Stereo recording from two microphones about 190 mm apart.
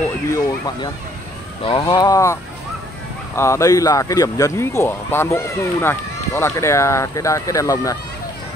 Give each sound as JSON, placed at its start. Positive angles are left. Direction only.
{"t": 0.3, "sound": "speech", "side_deg": 20}
{"t": 3.3, "sound": "speech", "side_deg": 15}